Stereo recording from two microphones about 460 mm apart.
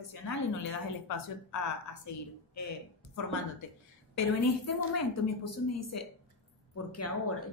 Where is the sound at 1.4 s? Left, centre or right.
Left.